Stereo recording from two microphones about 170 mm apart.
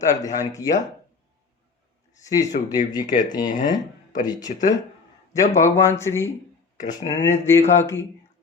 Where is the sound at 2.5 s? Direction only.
50° left (ahead or behind).